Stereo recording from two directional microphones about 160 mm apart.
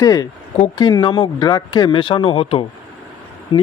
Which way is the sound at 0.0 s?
20° left (ahead or behind).